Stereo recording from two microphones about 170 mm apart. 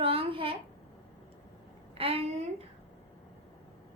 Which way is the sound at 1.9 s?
35° right (ahead or behind).